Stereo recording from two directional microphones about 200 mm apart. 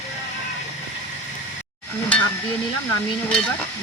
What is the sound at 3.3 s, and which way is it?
Speech, 5° left (ahead or behind).